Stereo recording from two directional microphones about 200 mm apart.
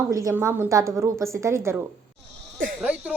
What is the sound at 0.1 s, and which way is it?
Speech, 10° right (ahead or behind).